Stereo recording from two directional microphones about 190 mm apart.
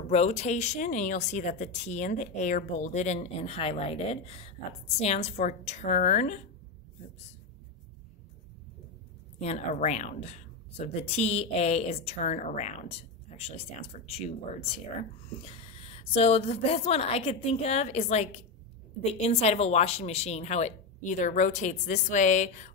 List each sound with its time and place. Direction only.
0.1 s speech: 35° left (ahead or behind)
9.4 s speech: 35° left (ahead or behind)